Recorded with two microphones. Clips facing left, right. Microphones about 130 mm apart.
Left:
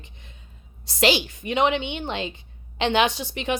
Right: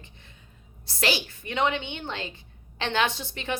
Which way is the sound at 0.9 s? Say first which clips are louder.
Left 6 dB; 20° left (ahead or behind).